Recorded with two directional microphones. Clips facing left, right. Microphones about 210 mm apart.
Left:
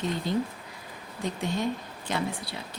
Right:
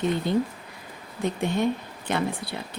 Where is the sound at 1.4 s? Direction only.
60° right (ahead or behind).